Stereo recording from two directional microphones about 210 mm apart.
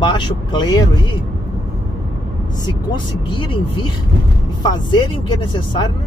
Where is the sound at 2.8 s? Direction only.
25° left (ahead or behind).